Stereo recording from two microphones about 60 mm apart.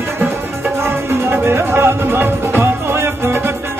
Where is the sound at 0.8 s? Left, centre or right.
Right.